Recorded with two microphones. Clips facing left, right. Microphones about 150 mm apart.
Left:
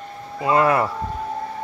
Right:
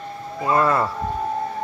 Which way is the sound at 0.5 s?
15° left (ahead or behind).